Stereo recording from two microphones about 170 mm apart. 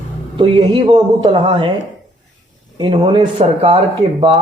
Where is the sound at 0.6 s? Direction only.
30° right (ahead or behind).